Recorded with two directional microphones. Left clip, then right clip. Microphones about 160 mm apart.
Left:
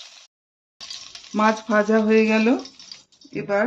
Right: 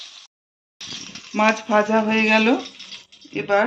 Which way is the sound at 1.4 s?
65° left (ahead or behind).